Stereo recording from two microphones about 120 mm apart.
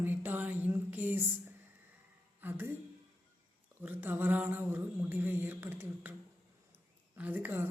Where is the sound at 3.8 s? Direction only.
15° right (ahead or behind).